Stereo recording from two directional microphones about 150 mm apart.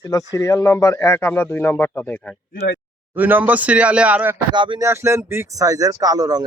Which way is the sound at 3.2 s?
10° right (ahead or behind).